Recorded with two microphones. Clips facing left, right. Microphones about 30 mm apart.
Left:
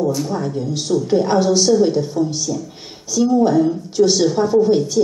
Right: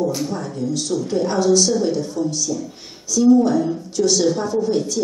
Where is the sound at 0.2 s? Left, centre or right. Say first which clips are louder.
Left 3 dB; centre.